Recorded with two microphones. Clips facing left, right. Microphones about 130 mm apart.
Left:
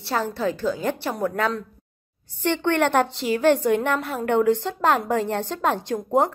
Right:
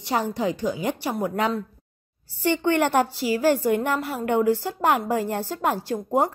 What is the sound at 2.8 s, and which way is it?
Speech, 10° right (ahead or behind).